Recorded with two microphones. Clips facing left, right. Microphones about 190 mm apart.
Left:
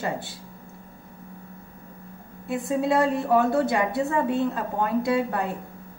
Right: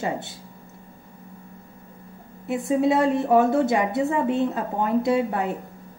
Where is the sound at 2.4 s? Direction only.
20° right (ahead or behind).